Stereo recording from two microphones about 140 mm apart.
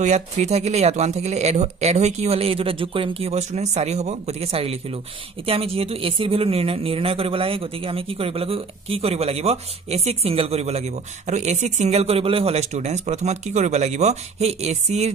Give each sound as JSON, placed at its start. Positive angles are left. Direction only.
{"t": 0.0, "sound": "speech", "side_deg": -55}